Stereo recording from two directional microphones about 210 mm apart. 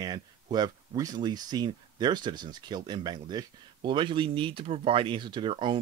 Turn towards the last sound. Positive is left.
turn(degrees=-25)  # may be behind; listen again after turning